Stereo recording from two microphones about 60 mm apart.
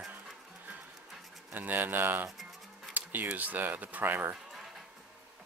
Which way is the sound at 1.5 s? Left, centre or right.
Right.